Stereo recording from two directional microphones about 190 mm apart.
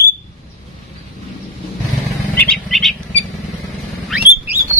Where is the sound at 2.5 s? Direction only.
Centre (ahead or behind).